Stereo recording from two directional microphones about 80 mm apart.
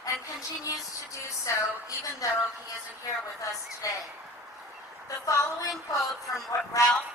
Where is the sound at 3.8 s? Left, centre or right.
Left.